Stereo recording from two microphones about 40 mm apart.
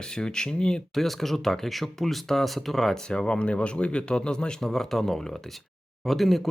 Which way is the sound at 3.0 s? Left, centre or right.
Left.